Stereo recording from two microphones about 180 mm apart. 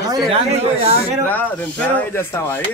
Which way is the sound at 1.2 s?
10° left (ahead or behind).